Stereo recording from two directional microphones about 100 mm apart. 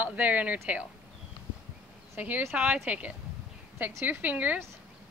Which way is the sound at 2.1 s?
15° right (ahead or behind).